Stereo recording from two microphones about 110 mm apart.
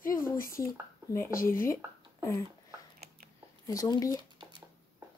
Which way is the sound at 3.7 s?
35° left (ahead or behind).